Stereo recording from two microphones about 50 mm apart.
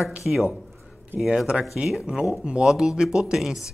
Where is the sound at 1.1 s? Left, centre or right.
Right.